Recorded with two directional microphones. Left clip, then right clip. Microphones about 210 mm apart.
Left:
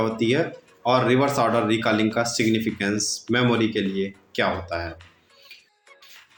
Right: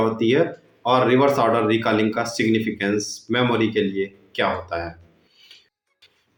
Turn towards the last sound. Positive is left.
turn(degrees=25)  # may be behind; listen again after turning